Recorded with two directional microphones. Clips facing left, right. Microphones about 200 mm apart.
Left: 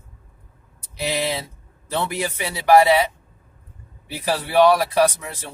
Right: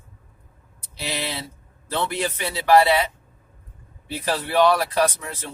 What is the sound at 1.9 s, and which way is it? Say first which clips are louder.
Speech: left 1 dB; 10° left (ahead or behind).